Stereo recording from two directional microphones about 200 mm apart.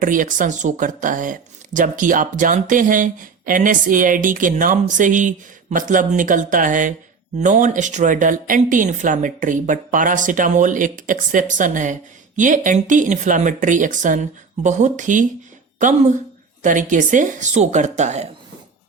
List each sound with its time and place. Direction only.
0.0 s speech: 40° right (ahead or behind)